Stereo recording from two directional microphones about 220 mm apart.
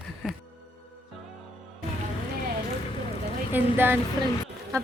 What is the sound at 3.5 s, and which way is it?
Speech, 10° right (ahead or behind).